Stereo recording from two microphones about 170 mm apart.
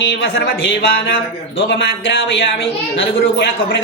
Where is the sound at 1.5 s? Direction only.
90° left.